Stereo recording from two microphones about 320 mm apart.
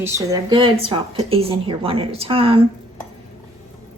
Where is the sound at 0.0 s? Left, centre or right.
Centre.